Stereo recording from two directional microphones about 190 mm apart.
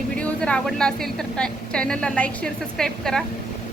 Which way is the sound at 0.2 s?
5° left (ahead or behind).